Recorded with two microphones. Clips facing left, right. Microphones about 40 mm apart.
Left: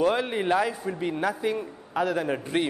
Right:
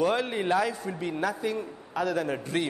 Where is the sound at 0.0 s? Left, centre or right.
Centre.